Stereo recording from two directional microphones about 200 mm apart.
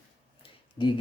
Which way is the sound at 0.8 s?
25° left (ahead or behind).